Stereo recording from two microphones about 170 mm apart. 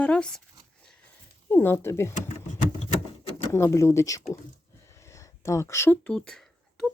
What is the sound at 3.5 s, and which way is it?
Speech, 15° left (ahead or behind).